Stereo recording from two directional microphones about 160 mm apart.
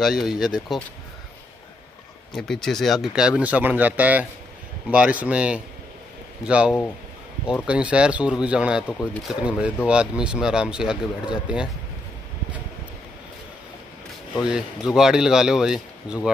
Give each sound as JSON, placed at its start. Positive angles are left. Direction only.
{"t": 0.0, "sound": "a man's voice", "side_deg": 0}
{"t": 2.3, "sound": "a man's voice", "side_deg": 0}
{"t": 14.4, "sound": "a man's voice", "side_deg": -5}